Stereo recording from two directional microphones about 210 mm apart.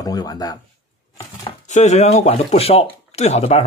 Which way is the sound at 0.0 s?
20° left (ahead or behind).